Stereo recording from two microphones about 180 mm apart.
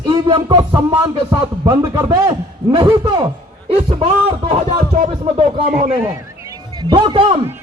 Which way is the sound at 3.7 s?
35° right (ahead or behind).